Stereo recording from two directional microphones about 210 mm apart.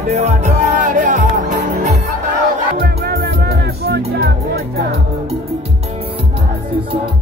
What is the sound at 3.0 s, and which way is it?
Music, 50° right (ahead or behind).